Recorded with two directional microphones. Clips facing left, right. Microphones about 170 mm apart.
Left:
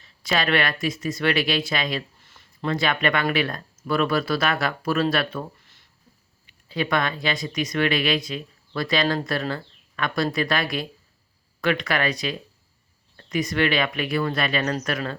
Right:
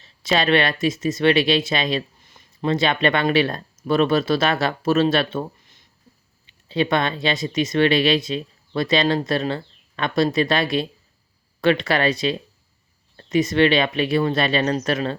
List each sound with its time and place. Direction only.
0.0 s speech: 25° right (ahead or behind)